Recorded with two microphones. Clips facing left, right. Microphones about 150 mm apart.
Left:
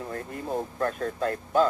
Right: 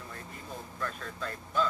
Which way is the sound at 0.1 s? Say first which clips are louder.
Left 14 dB; 55° left (ahead or behind).